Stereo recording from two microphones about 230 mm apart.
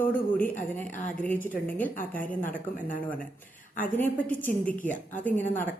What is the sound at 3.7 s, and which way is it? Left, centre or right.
Speech, centre.